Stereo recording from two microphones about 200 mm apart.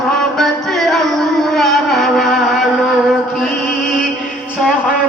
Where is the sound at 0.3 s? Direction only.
Centre (ahead or behind).